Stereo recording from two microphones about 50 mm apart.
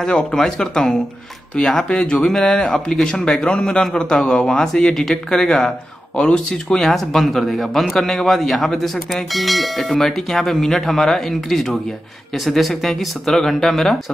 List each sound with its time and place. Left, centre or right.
0.0 s a man's voice: centre